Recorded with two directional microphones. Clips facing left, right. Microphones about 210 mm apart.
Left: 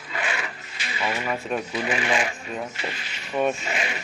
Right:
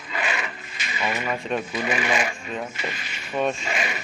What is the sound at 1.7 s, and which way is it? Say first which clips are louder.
Speech: even; 10° right (ahead or behind).